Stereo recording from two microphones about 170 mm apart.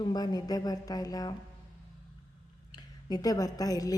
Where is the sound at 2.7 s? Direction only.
20° left (ahead or behind).